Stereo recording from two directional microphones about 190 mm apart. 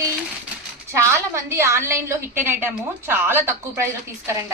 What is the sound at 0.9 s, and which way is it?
A woman's voice, 15° right (ahead or behind).